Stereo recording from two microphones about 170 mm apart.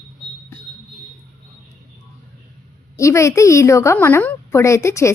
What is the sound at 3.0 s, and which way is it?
Speech, 15° left (ahead or behind).